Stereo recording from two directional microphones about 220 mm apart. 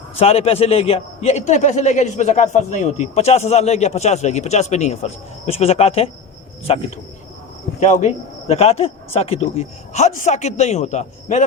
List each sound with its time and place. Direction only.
0.2 s a man's voice: 25° left (ahead or behind)